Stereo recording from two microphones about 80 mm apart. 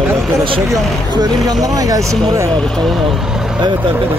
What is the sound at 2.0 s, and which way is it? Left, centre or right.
Speech, centre.